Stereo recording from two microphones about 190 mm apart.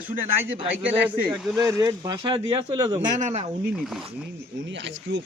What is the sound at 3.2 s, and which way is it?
Speech, 35° right (ahead or behind).